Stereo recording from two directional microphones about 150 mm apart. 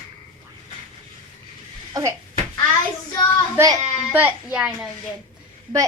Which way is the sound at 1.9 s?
20° right (ahead or behind).